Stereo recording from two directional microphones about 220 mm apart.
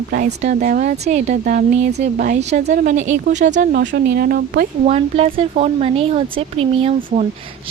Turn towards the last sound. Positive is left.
turn(degrees=-25)  # may be behind; listen again after turning